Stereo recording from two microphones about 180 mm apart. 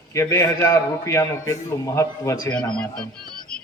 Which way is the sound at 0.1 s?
15° left (ahead or behind).